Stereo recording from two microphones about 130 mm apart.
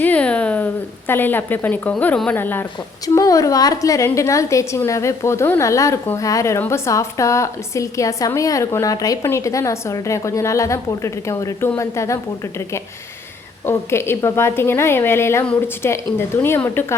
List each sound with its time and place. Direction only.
0.0 s a woman's voice: 10° left (ahead or behind)
3.2 s a woman's voice: 25° left (ahead or behind)